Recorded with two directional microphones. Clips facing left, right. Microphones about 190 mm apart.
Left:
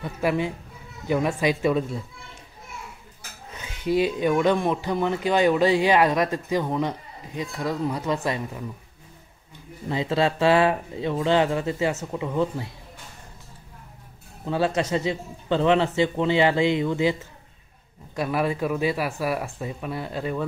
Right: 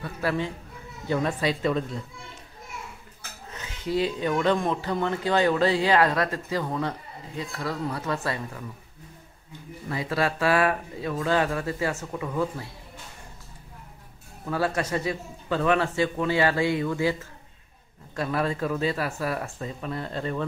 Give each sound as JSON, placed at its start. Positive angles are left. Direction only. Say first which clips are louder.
{"t": 0.0, "sound": "speech", "louder": "left 3 dB", "side_deg": 15}
{"t": 3.5, "sound": "speech", "louder": "left 4 dB", "side_deg": 15}
{"t": 9.8, "sound": "a man's voice", "louder": "left 4 dB", "side_deg": 25}
{"t": 14.4, "sound": "a man's voice", "louder": "left 3 dB", "side_deg": 20}